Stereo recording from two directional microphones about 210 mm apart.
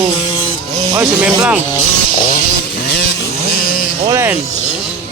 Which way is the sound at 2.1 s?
35° left (ahead or behind).